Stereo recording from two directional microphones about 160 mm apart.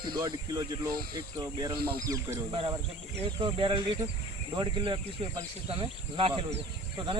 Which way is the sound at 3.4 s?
30° right (ahead or behind).